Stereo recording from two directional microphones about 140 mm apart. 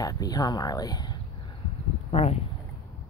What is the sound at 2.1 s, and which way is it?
Speech, 45° left (ahead or behind).